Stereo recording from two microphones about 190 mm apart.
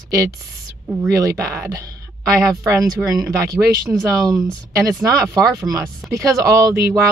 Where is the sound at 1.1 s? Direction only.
15° right (ahead or behind).